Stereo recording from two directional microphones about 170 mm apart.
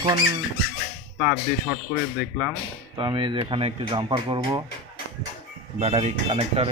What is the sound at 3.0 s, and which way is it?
Speech, 30° right (ahead or behind).